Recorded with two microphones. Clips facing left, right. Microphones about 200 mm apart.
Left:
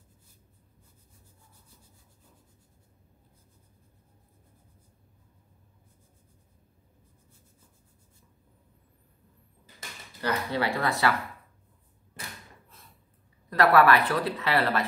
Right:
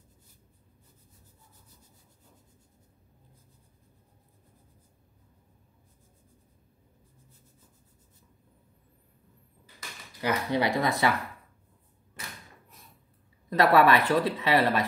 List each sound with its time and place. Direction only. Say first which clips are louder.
10.2 s speech: right 2 dB; 15° right (ahead or behind)
13.5 s speech: even; 20° right (ahead or behind)